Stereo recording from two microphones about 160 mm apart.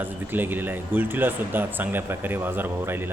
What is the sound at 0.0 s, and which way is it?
Speech, 10° right (ahead or behind).